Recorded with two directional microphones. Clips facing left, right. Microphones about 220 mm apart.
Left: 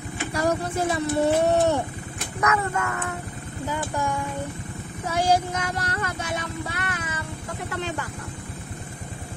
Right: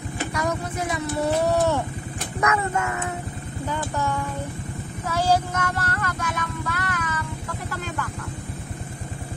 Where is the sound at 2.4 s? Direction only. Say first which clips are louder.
Right 1 dB; 25° right (ahead or behind).